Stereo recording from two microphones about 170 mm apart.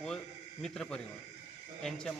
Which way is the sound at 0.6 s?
5° left (ahead or behind).